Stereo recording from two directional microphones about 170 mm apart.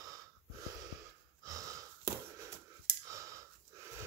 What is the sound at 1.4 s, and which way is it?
Wheeze, 20° right (ahead or behind).